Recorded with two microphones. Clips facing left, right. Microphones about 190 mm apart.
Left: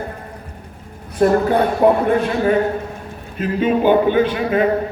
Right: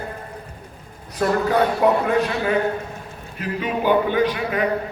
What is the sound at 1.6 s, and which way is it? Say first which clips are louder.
A man's voice: left 3 dB; 50° left (ahead or behind).